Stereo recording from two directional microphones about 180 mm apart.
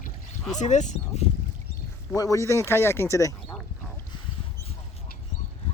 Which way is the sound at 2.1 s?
15° left (ahead or behind).